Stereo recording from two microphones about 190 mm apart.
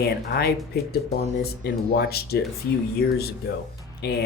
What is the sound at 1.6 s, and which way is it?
Speech, 55° left (ahead or behind).